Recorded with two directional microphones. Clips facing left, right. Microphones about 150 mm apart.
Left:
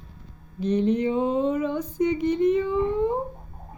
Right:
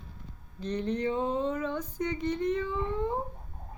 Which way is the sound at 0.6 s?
15° left (ahead or behind).